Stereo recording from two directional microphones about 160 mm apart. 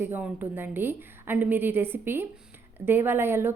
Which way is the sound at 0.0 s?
10° right (ahead or behind).